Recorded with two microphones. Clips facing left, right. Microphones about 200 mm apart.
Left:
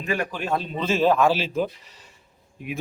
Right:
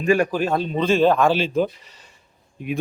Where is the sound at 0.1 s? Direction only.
40° right (ahead or behind).